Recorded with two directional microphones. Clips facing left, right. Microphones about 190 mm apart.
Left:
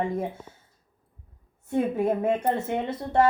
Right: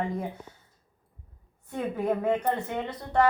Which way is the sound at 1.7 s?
25° left (ahead or behind).